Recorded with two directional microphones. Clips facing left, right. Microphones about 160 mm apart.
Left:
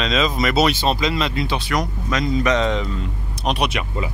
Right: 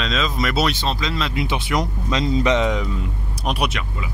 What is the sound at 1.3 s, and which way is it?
Speech, 15° right (ahead or behind).